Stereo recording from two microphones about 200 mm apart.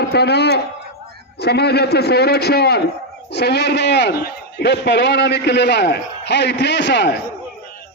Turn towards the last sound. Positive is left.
turn(degrees=55)  # may be behind; listen again after turning